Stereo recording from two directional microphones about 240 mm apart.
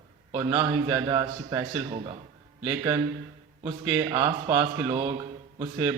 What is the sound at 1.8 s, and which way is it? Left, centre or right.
Speech, right.